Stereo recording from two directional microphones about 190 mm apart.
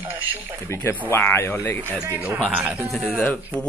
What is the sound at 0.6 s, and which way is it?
Speech, 10° left (ahead or behind).